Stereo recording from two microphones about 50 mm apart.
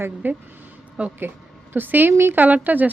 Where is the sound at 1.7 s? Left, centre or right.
Right.